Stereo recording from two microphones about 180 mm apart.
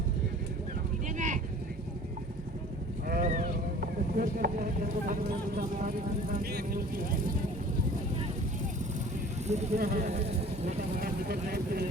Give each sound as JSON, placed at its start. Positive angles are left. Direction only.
{"t": 1.0, "sound": "vehicle", "side_deg": -45}
{"t": 3.1, "sound": "boat", "side_deg": -45}
{"t": 5.5, "sound": "speech", "side_deg": -50}
{"t": 9.5, "sound": "speech", "side_deg": -40}
{"t": 11.0, "sound": "speech", "side_deg": -55}